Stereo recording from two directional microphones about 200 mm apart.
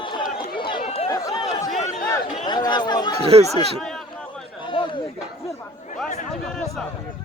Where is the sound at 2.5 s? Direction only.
20° left (ahead or behind).